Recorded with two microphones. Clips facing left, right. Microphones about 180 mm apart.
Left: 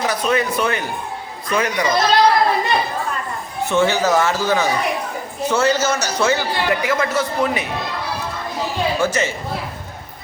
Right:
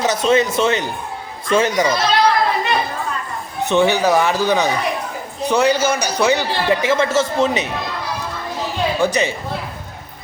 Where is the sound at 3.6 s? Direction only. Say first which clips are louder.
Right 2 dB; 15° right (ahead or behind).